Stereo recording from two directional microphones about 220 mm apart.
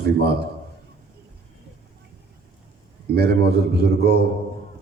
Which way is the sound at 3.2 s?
45° right (ahead or behind).